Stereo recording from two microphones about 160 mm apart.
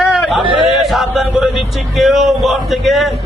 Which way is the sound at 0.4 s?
30° right (ahead or behind).